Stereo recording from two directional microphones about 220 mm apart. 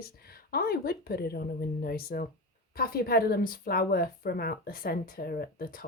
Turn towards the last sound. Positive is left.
turn(degrees=40)  # may be behind; listen again after turning